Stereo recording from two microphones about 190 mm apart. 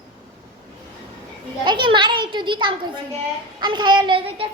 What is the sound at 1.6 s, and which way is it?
A child's voice, 25° right (ahead or behind).